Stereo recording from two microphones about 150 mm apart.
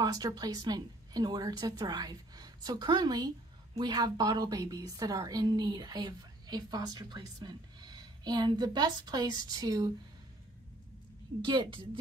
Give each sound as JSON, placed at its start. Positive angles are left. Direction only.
{"t": 0.0, "sound": "a woman's voice", "side_deg": -25}
{"t": 11.4, "sound": "a woman's voice", "side_deg": -35}